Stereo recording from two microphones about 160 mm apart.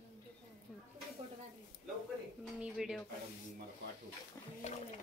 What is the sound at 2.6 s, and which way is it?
Speech, 5° right (ahead or behind).